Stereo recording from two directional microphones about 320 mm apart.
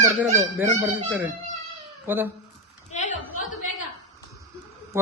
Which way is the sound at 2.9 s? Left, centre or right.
Left.